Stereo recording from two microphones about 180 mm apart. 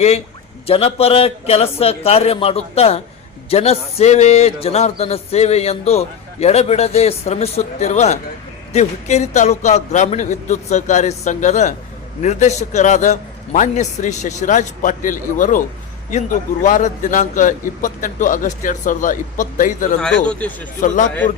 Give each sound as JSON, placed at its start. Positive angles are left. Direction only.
{"t": 0.7, "sound": "a man's voice", "side_deg": 30}
{"t": 20.0, "sound": "speech", "side_deg": 5}
{"t": 20.8, "sound": "a man's voice", "side_deg": 45}